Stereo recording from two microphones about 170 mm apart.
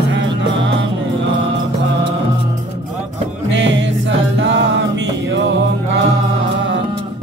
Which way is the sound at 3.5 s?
90° right.